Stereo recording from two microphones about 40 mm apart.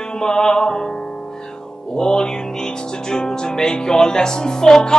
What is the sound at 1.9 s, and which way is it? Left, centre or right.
Music, centre.